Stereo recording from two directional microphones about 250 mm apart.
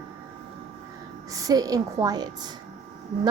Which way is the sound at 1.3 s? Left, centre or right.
Centre.